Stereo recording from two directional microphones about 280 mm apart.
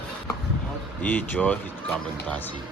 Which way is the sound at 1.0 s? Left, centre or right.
Centre.